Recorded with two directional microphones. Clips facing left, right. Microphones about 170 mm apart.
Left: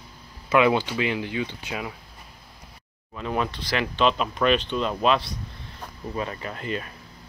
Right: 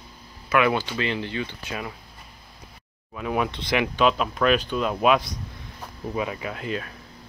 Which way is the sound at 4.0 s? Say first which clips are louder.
Even; 5° right (ahead or behind).